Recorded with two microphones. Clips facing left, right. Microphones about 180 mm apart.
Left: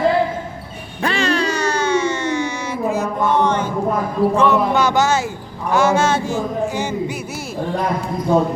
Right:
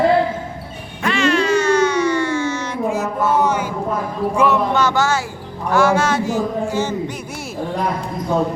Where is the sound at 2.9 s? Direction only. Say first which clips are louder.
Left 1 dB; 5° right (ahead or behind).